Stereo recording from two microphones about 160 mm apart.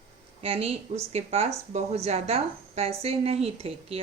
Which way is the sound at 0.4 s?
35° right (ahead or behind).